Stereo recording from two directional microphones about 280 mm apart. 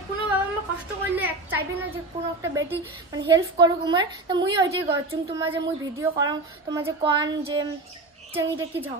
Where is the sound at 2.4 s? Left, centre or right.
Centre.